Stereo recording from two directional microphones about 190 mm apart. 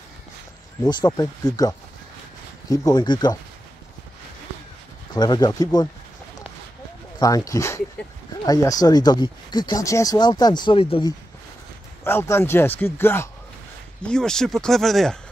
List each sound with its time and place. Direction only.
0.8 s speech: 20° left (ahead or behind)
5.1 s speech: 20° left (ahead or behind)
7.2 s speech: 20° left (ahead or behind)
12.0 s speech: 10° left (ahead or behind)